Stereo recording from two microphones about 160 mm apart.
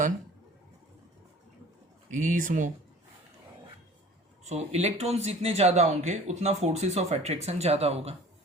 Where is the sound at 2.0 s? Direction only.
55° right (ahead or behind).